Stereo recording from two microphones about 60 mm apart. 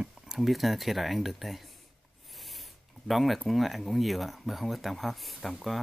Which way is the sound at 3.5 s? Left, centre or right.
Centre.